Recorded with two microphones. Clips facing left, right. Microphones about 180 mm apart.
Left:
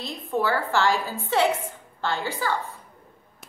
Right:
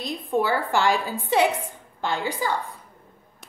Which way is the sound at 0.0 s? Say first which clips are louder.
Right 2 dB; 15° right (ahead or behind).